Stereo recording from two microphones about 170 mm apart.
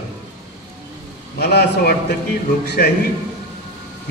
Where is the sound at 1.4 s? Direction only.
75° left (ahead or behind).